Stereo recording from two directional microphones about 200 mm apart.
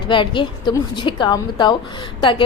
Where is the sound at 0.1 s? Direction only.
25° left (ahead or behind).